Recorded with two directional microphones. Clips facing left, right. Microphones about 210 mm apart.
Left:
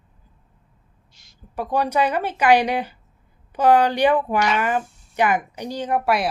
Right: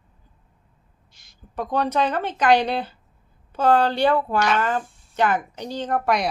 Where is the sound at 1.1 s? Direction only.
55° right (ahead or behind).